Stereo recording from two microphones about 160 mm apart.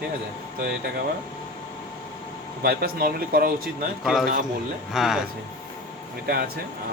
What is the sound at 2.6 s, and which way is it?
Speech, 70° right (ahead or behind).